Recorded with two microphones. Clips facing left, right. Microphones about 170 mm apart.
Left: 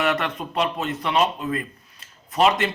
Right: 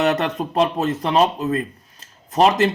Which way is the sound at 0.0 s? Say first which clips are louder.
Right 4 dB; 40° right (ahead or behind).